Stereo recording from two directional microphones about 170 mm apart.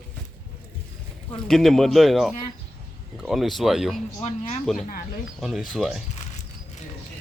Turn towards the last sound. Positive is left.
turn(degrees=0)  # may be behind; listen again after turning